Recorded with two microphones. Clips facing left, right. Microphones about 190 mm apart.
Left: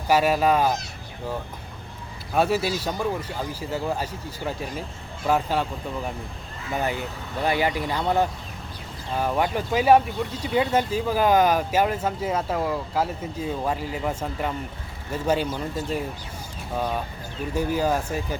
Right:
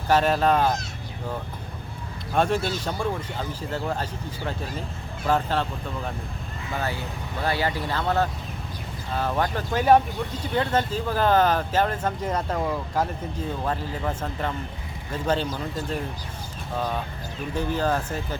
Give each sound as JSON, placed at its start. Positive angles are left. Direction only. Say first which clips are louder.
{"t": 0.1, "sound": "speech", "louder": "left 1 dB", "side_deg": 10}
{"t": 2.3, "sound": "speech", "louder": "left 1 dB", "side_deg": 5}
{"t": 6.7, "sound": "speech", "louder": "left 3 dB", "side_deg": 15}